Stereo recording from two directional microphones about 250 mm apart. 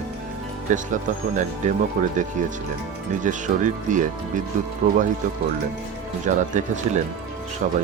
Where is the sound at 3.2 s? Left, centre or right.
Right.